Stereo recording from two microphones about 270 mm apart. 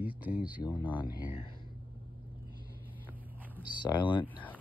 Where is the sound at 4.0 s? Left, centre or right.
Centre.